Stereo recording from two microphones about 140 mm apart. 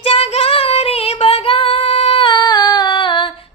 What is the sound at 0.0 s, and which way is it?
Child singing, 45° left (ahead or behind).